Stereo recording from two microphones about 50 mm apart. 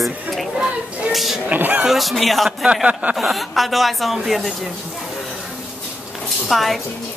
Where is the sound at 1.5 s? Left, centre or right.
Right.